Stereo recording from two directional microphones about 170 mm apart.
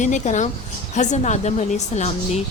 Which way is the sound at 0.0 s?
45° left (ahead or behind).